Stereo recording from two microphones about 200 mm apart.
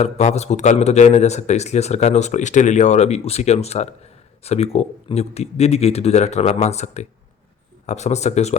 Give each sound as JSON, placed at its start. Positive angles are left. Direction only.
{"t": 0.0, "sound": "a man's voice", "side_deg": 35}